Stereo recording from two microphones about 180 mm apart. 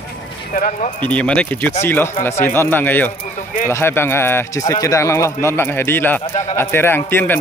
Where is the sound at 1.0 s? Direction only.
5° left (ahead or behind).